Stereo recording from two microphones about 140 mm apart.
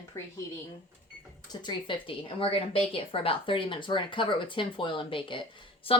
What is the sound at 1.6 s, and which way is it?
Speech, 35° left (ahead or behind).